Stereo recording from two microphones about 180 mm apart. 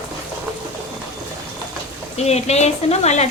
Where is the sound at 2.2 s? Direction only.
35° left (ahead or behind).